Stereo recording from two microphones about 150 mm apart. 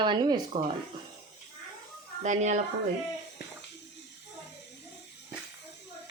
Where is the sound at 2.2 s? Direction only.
50° right (ahead or behind).